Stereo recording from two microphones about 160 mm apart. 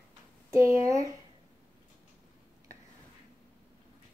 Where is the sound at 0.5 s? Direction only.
20° right (ahead or behind).